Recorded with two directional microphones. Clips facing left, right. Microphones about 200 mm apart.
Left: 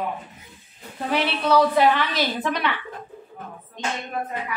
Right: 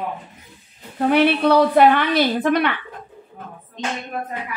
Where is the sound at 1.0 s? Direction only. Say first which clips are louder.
Right 7 dB; 60° right (ahead or behind).